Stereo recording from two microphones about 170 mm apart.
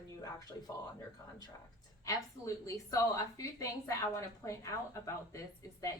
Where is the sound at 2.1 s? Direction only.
20° left (ahead or behind).